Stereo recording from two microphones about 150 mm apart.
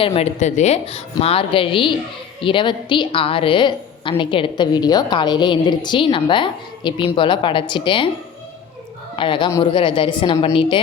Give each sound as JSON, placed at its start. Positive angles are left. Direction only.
{"t": 0.0, "sound": "a woman's voice", "side_deg": 45}
{"t": 9.1, "sound": "a woman's voice", "side_deg": 35}